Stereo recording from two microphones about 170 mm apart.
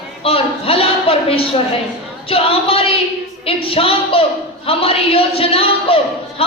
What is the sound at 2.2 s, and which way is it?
Speech, 35° left (ahead or behind).